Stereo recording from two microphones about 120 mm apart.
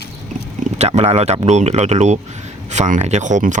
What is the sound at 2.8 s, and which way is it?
Speech, 80° right.